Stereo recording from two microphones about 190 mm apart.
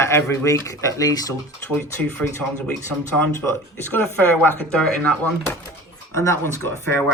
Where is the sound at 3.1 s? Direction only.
15° left (ahead or behind).